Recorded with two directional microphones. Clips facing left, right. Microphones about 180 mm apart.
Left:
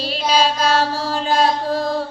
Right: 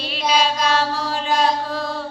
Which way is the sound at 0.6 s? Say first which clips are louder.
Left 2 dB; 40° left (ahead or behind).